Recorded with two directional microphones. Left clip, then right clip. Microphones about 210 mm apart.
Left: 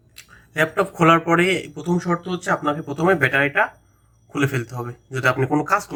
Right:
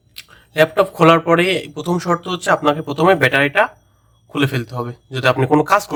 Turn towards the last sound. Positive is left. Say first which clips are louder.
# right 6 dB
turn(degrees=-30)  # may be behind; listen again after turning